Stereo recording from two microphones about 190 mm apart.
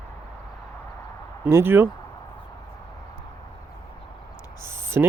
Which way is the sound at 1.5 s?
10° right (ahead or behind).